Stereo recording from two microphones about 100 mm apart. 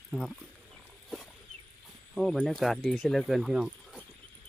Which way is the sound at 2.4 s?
Centre (ahead or behind).